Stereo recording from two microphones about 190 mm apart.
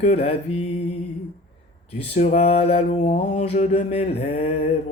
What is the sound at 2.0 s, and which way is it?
Mantra, 40° left (ahead or behind).